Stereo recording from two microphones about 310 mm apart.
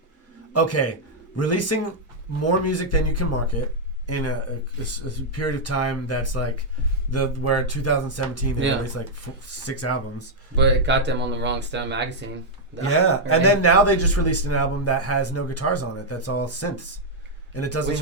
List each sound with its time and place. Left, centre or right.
0.5 s speech: left
10.5 s speech: right
12.8 s speech: left